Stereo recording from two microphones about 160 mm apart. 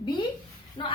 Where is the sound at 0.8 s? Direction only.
30° left (ahead or behind).